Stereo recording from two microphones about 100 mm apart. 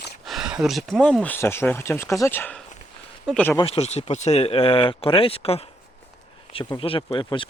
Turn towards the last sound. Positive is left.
turn(degrees=65)  # may be behind; listen again after turning